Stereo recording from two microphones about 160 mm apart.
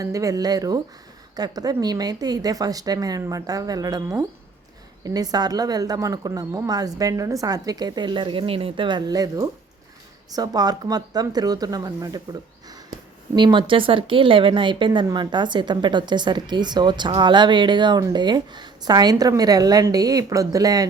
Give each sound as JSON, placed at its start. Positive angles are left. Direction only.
{"t": 0.0, "sound": "speech", "side_deg": -20}